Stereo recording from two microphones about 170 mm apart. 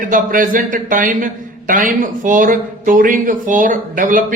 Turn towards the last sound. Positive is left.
turn(degrees=-55)  # may be behind; listen again after turning